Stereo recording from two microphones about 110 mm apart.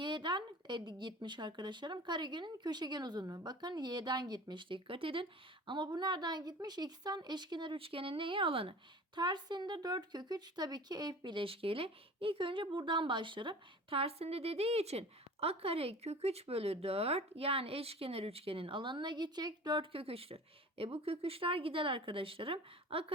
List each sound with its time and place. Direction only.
0.0 s speech: 45° right (ahead or behind)
9.1 s speech: 45° right (ahead or behind)